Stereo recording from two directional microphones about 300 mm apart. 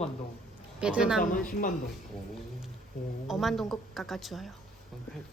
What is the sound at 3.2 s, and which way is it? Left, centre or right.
Speech, centre.